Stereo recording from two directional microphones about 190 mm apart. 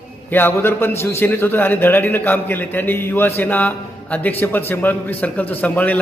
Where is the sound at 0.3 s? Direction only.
10° left (ahead or behind).